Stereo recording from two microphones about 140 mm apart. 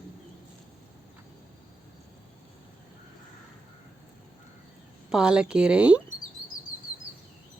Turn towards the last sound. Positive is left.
turn(degrees=-10)  # may be behind; listen again after turning